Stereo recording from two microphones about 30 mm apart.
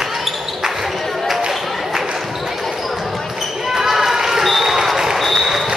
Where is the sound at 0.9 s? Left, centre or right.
Centre.